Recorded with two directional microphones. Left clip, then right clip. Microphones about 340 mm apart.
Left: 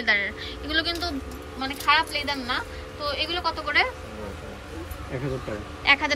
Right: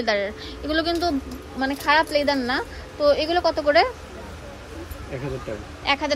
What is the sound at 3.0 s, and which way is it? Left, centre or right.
Speech, right.